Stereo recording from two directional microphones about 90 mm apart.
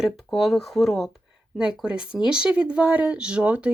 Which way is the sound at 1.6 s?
10° right (ahead or behind).